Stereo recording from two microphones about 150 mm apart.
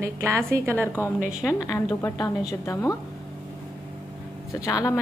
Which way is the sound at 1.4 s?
25° left (ahead or behind).